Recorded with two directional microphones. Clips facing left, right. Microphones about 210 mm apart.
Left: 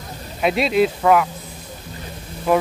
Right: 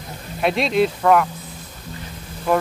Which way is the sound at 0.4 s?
Centre (ahead or behind).